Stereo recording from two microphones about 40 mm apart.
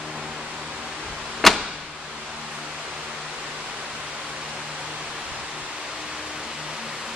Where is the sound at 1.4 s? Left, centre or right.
Centre.